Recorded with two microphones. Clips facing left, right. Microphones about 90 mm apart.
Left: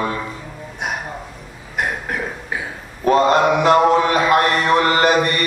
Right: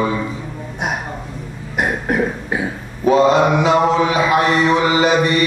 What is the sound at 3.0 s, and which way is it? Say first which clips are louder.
Mantra: right 2 dB; centre (ahead or behind).